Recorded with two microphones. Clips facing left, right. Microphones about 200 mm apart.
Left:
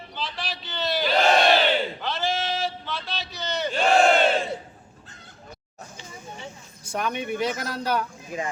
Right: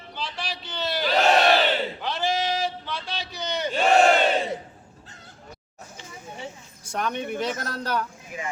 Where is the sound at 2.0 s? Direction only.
15° right (ahead or behind).